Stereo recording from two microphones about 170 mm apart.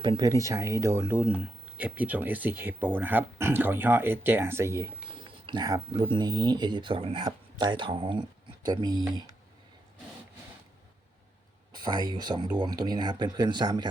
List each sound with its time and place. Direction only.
0.0 s speech: 25° right (ahead or behind)
11.8 s speech: 25° right (ahead or behind)